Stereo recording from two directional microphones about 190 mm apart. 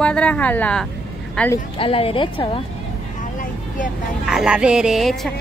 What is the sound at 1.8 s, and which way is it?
Speech, 30° left (ahead or behind).